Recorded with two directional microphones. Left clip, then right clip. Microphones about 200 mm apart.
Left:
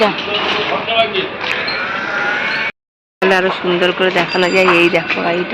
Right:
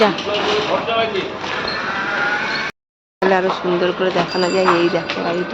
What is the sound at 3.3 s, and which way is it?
Speech, 10° left (ahead or behind).